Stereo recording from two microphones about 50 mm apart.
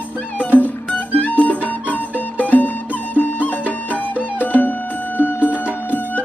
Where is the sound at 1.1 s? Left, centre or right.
Left.